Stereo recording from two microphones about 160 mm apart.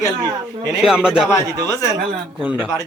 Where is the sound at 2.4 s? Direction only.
10° right (ahead or behind).